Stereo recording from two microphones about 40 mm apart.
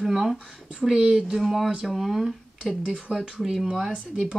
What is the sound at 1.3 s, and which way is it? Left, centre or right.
Speech, centre.